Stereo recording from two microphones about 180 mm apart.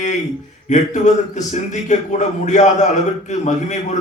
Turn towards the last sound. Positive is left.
turn(degrees=40)  # may be behind; listen again after turning